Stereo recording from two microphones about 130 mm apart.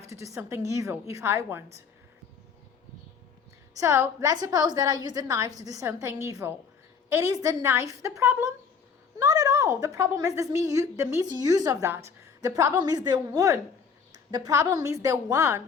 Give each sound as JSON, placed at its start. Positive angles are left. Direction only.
{"t": 0.1, "sound": "a woman's voice", "side_deg": -25}
{"t": 3.8, "sound": "a woman's voice", "side_deg": -20}